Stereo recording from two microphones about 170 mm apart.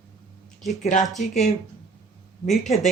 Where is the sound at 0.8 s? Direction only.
45° left (ahead or behind).